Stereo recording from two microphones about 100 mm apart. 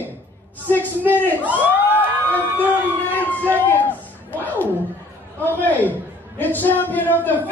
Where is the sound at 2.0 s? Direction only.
20° left (ahead or behind).